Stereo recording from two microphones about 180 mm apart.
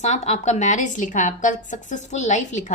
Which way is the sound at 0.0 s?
40° left (ahead or behind).